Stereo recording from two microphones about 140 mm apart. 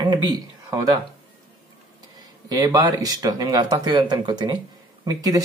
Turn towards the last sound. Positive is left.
turn(degrees=-25)  # may be behind; listen again after turning